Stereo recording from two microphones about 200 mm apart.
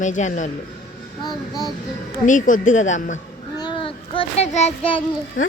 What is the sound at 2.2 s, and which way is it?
Speech, 40° left (ahead or behind).